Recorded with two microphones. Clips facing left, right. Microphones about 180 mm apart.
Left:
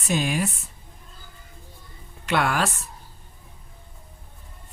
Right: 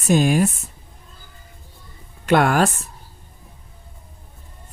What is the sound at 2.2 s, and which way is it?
Speech, 45° right (ahead or behind).